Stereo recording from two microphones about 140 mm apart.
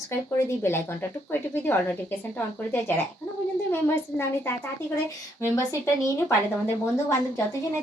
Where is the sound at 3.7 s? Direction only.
15° left (ahead or behind).